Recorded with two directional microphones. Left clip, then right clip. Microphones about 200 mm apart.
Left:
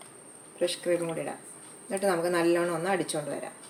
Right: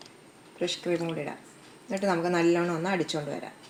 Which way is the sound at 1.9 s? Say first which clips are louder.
Even; 30° right (ahead or behind).